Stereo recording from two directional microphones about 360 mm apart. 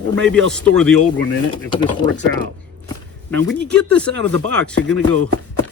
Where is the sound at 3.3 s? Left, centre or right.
Centre.